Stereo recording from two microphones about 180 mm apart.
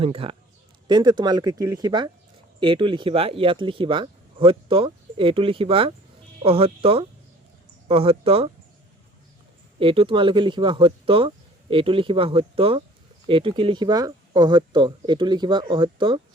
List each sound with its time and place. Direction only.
0.0 s speech: 30° right (ahead or behind)
9.8 s speech: 30° right (ahead or behind)